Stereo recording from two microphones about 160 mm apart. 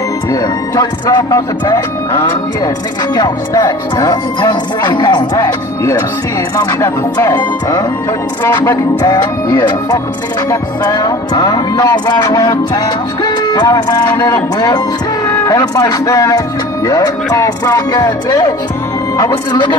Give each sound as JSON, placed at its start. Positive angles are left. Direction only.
{"t": 0.3, "sound": "music", "side_deg": 25}